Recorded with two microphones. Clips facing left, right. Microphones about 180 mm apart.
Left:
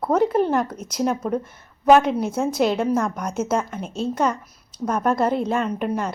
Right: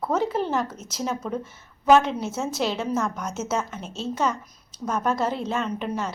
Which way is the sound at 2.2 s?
55° left (ahead or behind).